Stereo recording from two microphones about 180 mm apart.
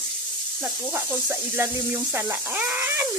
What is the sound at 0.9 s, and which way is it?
Speech, 10° right (ahead or behind).